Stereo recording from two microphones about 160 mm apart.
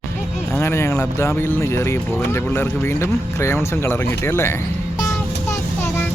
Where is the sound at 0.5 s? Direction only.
15° left (ahead or behind).